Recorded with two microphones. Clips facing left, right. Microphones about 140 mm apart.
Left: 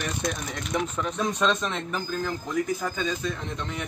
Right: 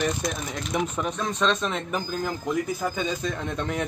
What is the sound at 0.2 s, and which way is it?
Speech, 5° right (ahead or behind).